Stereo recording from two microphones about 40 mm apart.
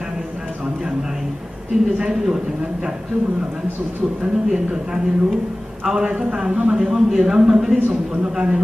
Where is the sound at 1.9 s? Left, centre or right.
Centre.